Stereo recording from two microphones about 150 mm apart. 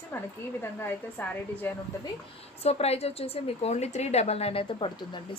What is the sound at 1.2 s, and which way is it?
Speech, 10° left (ahead or behind).